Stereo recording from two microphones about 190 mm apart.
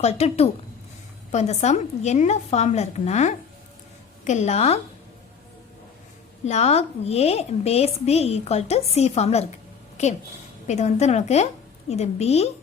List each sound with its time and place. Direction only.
0.0 s a woman's voice: 35° left (ahead or behind)
6.4 s a woman's voice: 35° left (ahead or behind)